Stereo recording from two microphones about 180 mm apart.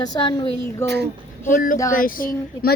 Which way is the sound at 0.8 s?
65° right (ahead or behind).